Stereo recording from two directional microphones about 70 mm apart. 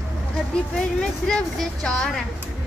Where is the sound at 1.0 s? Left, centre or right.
Centre.